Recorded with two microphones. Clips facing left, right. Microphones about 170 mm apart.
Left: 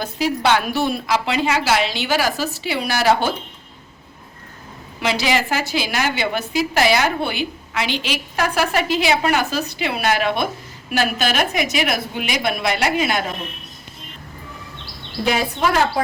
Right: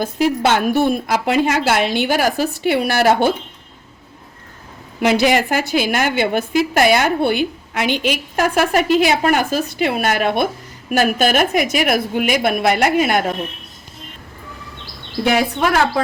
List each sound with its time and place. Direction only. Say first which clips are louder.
0.0 s a woman's voice: right 4 dB; 50° right (ahead or behind)
4.9 s a woman's voice: right 6 dB; 50° right (ahead or behind)